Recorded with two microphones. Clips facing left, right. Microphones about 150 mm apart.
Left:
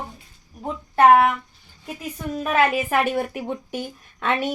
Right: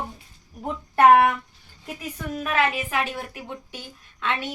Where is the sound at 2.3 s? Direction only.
40° left (ahead or behind).